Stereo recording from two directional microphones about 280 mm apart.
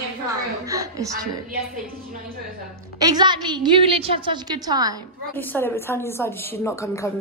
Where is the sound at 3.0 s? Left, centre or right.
Centre.